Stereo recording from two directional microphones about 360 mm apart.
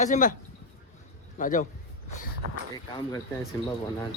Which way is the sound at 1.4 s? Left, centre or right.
Left.